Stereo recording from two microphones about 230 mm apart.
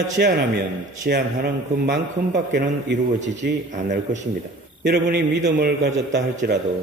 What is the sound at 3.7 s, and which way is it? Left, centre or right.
Speech, right.